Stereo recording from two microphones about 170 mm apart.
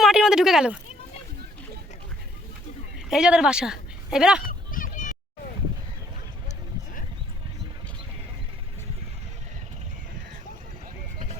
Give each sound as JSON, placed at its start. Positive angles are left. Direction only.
{"t": 0.0, "sound": "speech", "side_deg": -5}
{"t": 3.1, "sound": "speech", "side_deg": -5}
{"t": 4.4, "sound": "a sound", "side_deg": 55}